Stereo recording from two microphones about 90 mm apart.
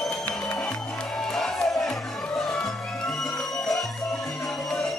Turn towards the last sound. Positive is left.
turn(degrees=5)  # may be behind; listen again after turning